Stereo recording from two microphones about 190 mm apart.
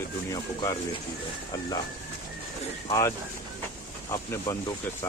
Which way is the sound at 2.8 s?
15° left (ahead or behind).